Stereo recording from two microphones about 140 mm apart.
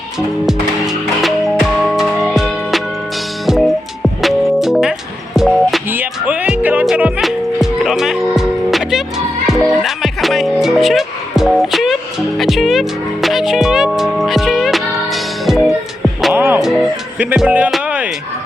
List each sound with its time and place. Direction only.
0.4 s music: centre (ahead or behind)
5.9 s music: 10° right (ahead or behind)
16.3 s music: 15° right (ahead or behind)